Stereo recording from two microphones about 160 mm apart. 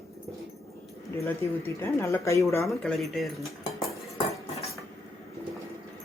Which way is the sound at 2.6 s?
Centre (ahead or behind).